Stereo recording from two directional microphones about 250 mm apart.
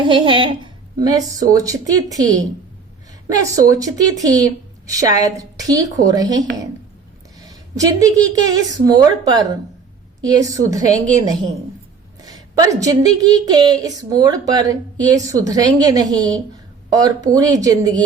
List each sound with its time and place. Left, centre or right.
0.0 s a woman's voice: centre
3.7 s a woman's voice: centre
8.0 s a woman's voice: centre